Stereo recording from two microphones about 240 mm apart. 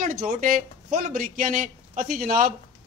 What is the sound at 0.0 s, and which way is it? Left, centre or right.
A man's voice, right.